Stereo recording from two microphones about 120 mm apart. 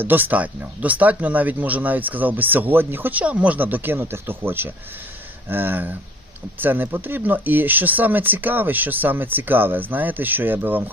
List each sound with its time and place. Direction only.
0.0 s speech: 15° right (ahead or behind)